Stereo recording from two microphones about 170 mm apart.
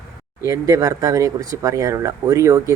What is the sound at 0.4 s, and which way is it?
Speech, 20° right (ahead or behind).